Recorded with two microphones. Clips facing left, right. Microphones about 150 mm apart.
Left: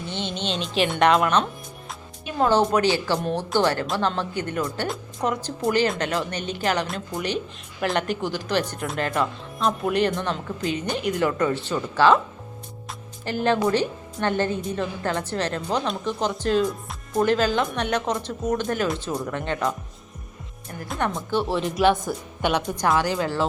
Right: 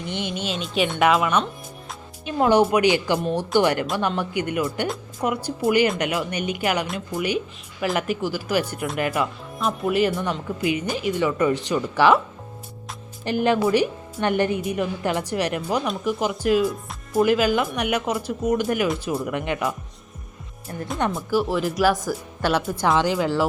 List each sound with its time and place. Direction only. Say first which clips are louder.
0.1 s speech: right 1 dB; 10° right (ahead or behind)
11.4 s speech: right 3 dB; 15° right (ahead or behind)
13.2 s speech: right 2 dB; 15° right (ahead or behind)
20.9 s speech: right 2 dB; centre (ahead or behind)
21.8 s speech: left 2 dB; 25° left (ahead or behind)
23.0 s speech: right 2 dB; 15° right (ahead or behind)